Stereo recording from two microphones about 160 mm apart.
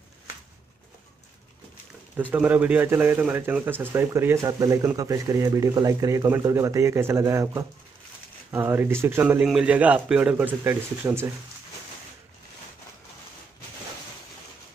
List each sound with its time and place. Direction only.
2.3 s speech: 10° right (ahead or behind)